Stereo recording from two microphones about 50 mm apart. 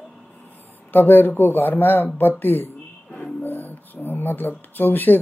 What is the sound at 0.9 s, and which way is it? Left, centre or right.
Speech, left.